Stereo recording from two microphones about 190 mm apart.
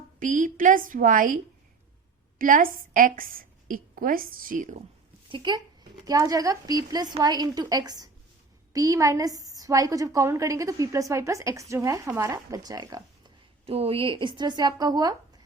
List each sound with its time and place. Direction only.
0.2 s a woman's voice: 45° right (ahead or behind)
2.4 s a woman's voice: 45° right (ahead or behind)
5.3 s a woman's voice: 20° right (ahead or behind)